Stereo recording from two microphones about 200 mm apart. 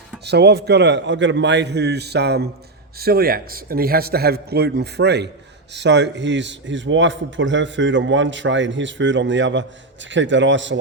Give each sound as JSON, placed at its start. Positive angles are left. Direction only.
{"t": 0.3, "sound": "a man's voice", "side_deg": -55}